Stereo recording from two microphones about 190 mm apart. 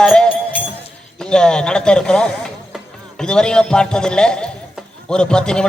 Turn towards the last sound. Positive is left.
turn(degrees=5)  # may be behind; listen again after turning